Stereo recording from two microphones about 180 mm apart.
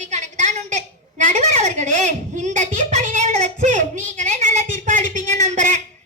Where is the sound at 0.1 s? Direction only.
40° right (ahead or behind).